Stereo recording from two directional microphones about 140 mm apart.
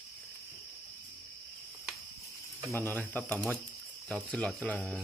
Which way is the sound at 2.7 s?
15° left (ahead or behind).